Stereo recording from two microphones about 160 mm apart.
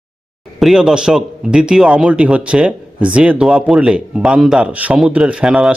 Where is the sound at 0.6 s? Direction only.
Centre (ahead or behind).